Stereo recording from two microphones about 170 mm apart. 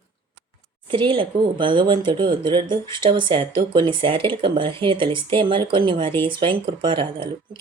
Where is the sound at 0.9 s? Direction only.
30° right (ahead or behind).